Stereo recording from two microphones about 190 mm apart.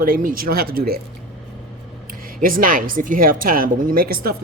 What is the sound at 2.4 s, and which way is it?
Speech, 45° right (ahead or behind).